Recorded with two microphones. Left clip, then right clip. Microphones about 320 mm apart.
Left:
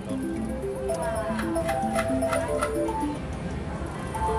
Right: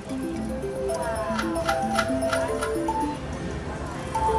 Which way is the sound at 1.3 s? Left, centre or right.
Centre.